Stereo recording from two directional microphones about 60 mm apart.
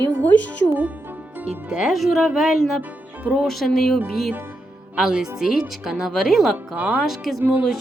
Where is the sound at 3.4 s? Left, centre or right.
Centre.